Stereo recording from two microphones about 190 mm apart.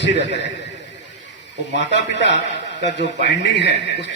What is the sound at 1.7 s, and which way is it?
Speech, 65° left (ahead or behind).